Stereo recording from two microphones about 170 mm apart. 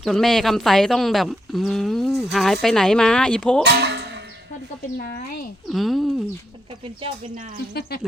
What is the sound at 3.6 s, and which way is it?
Music, 85° right.